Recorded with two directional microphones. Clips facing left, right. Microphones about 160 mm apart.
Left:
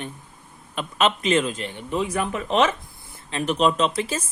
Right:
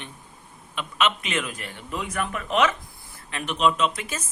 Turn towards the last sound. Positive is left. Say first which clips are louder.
# left 3 dB
turn(degrees=30)  # may be behind; listen again after turning